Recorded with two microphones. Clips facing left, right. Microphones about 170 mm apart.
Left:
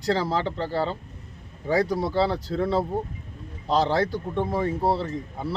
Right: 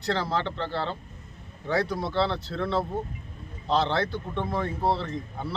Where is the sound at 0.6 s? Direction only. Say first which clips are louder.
Left 4 dB; 40° left (ahead or behind).